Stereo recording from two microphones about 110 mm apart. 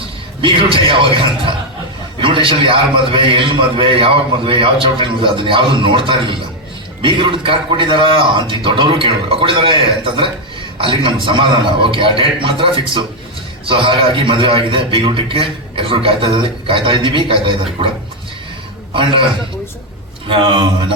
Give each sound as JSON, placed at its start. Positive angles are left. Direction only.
{"t": 0.4, "sound": "a man's voice", "side_deg": -50}
{"t": 2.2, "sound": "a man's voice", "side_deg": -50}
{"t": 20.2, "sound": "a man's voice", "side_deg": -50}